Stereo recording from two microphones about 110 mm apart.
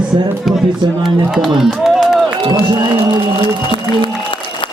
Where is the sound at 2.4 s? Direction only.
45° right (ahead or behind).